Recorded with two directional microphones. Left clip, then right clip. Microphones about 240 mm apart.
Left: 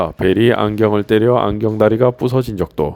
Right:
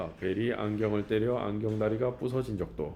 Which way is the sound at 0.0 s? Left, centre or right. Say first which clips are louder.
Left 18 dB; left.